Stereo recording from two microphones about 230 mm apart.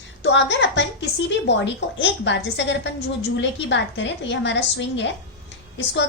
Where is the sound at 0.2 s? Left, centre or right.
Left.